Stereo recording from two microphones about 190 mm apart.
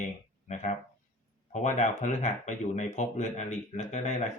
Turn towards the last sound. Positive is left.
turn(degrees=40)  # may be behind; listen again after turning